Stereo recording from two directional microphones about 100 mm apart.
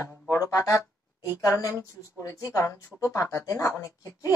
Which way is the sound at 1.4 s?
35° left (ahead or behind).